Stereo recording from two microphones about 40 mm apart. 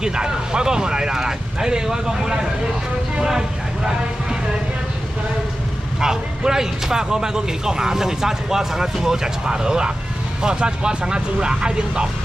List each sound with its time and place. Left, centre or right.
0.0 s speech: centre
3.2 s vehicle: centre
5.9 s speech: centre